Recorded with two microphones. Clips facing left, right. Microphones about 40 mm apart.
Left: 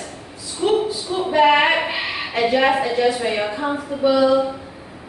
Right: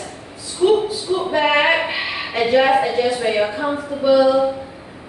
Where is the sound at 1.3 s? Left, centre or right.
Centre.